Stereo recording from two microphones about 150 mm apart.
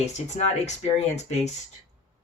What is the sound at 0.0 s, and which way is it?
Speech, 45° left (ahead or behind).